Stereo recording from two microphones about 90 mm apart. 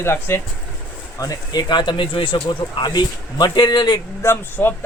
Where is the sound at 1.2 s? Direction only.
45° left (ahead or behind).